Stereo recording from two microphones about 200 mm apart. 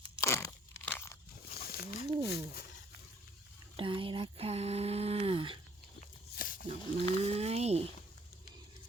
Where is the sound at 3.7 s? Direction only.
25° right (ahead or behind).